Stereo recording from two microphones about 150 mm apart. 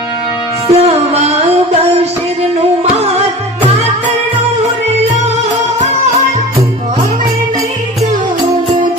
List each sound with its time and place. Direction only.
0.7 s music: 45° right (ahead or behind)